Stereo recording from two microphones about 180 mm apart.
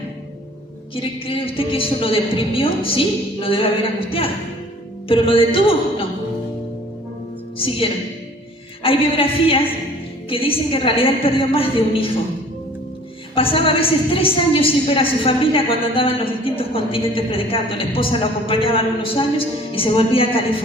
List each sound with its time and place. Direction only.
0.9 s a woman's voice: 30° left (ahead or behind)
5.0 s a woman's voice: 30° left (ahead or behind)
8.8 s a woman's voice: 30° left (ahead or behind)
13.3 s a woman's voice: 30° left (ahead or behind)